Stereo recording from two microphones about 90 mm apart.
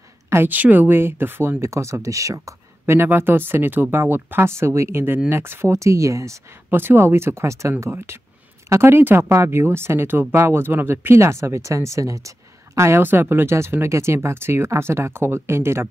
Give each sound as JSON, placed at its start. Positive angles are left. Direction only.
{"t": 0.3, "sound": "speech", "side_deg": -20}